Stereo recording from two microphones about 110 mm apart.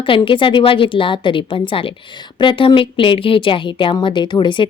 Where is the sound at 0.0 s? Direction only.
50° left (ahead or behind).